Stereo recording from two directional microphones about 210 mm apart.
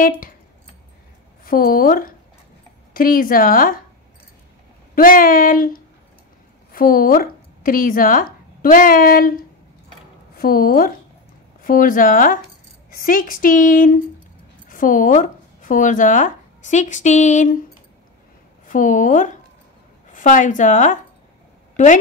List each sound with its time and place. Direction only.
1.4 s a woman's voice: 45° left (ahead or behind)
4.9 s a woman's voice: 40° left (ahead or behind)
18.7 s a woman's voice: 40° left (ahead or behind)